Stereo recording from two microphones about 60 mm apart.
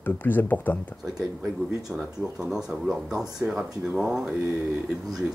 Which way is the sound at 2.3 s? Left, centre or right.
Centre.